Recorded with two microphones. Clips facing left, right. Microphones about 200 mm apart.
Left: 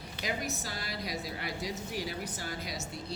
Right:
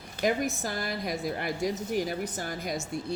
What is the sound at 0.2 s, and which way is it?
A woman's voice, 50° right (ahead or behind).